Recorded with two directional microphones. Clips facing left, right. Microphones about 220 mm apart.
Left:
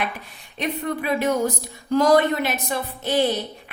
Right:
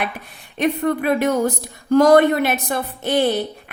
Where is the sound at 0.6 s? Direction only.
55° right (ahead or behind).